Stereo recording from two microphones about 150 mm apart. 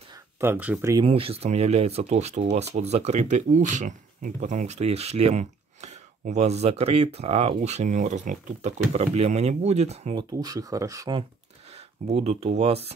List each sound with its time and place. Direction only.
0.4 s speech: 10° right (ahead or behind)
1.0 s speech: 40° right (ahead or behind)
10.1 s speech: 25° right (ahead or behind)
11.7 s speech: 45° right (ahead or behind)